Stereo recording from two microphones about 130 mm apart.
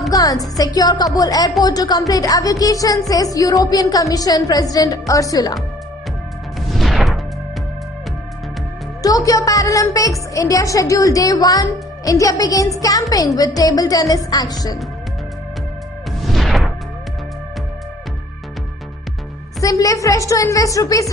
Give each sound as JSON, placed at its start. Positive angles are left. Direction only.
{"t": 0.1, "sound": "a woman's voice", "side_deg": 30}
{"t": 6.7, "sound": "music", "side_deg": 0}
{"t": 9.0, "sound": "a woman's voice", "side_deg": 25}
{"t": 16.1, "sound": "music", "side_deg": 0}
{"t": 19.6, "sound": "a woman's voice", "side_deg": 25}